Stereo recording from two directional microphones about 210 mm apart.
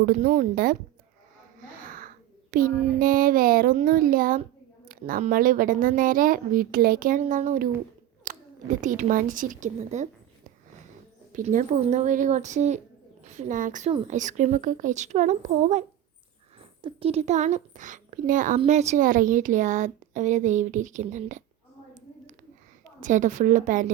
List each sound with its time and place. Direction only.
0.0 s speech: 40° right (ahead or behind)
1.8 s babbling: 40° right (ahead or behind)
2.5 s a child's voice: 40° right (ahead or behind)
8.3 s a sound: 40° right (ahead or behind)
8.8 s a child's voice: 35° right (ahead or behind)
11.3 s a child's voice: 40° right (ahead or behind)
23.0 s a child's voice: 35° right (ahead or behind)